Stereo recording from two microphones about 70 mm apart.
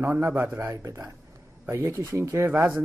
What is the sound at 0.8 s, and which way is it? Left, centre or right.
Speech, right.